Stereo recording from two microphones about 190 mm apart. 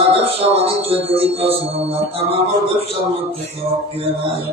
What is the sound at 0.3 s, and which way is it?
Music, 30° right (ahead or behind).